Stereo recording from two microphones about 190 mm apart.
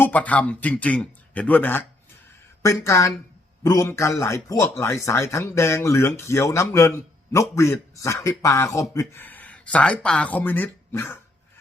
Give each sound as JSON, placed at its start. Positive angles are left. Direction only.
{"t": 0.0, "sound": "speech", "side_deg": 5}